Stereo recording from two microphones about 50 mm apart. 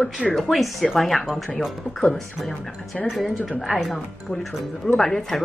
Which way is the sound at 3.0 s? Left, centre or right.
Centre.